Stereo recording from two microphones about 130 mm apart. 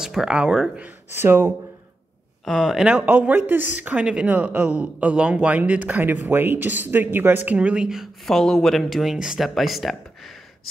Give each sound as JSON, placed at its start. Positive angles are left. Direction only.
{"t": 0.0, "sound": "speech", "side_deg": -5}
{"t": 1.1, "sound": "a woman's voice", "side_deg": -20}
{"t": 2.4, "sound": "a woman's voice", "side_deg": 0}